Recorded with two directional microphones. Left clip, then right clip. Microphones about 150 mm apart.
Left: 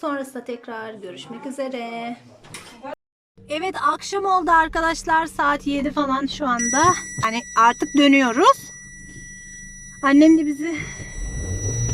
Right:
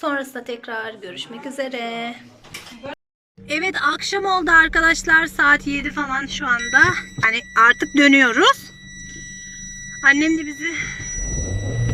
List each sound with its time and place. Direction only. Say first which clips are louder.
0.0 s speech: right 3 dB; 10° left (ahead or behind)
3.5 s speech: right 2 dB; 10° left (ahead or behind)
10.0 s a woman's voice: left 1 dB; 30° left (ahead or behind)